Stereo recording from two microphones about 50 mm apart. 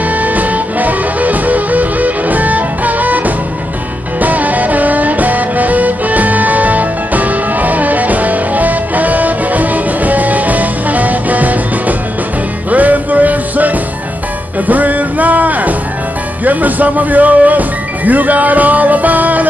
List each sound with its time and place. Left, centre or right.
0.1 s music: right
12.7 s music: right
16.4 s speech: right